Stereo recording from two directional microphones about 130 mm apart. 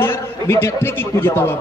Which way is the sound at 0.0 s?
20° left (ahead or behind).